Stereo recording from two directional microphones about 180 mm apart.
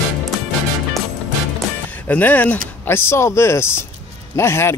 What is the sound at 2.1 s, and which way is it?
A man's voice, 10° left (ahead or behind).